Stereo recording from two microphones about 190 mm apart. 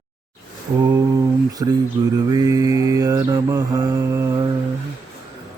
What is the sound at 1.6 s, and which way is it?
Speech, 20° right (ahead or behind).